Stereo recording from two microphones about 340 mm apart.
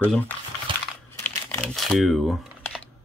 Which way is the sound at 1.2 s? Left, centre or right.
Centre.